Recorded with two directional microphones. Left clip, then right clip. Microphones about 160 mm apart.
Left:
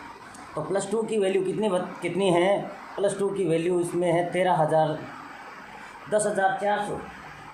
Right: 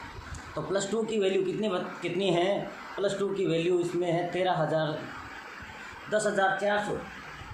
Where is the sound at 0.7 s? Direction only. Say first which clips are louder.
Left 3 dB; 30° left (ahead or behind).